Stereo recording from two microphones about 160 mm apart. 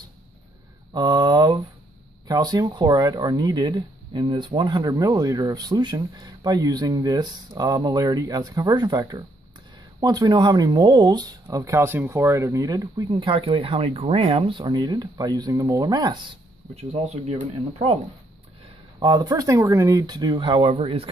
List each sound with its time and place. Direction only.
0.9 s speech: 25° right (ahead or behind)
16.7 s speech: 40° right (ahead or behind)
18.9 s speech: 25° right (ahead or behind)